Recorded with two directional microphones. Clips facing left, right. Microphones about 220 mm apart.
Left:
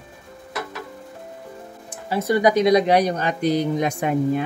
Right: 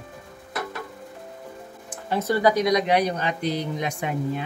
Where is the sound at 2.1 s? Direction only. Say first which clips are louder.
Left 3 dB; 10° left (ahead or behind); by 4.4 s 50° left (ahead or behind).